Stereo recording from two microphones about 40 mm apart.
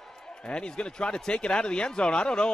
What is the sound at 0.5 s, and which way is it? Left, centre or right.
Speech, left.